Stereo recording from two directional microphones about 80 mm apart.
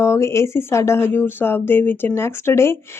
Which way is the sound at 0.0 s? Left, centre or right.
Left.